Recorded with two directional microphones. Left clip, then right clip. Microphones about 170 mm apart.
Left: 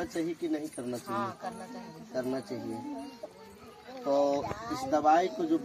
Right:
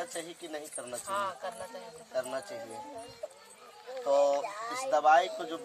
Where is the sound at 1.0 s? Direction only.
25° right (ahead or behind).